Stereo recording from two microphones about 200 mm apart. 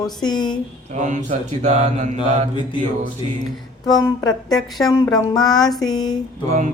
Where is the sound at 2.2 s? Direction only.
25° left (ahead or behind).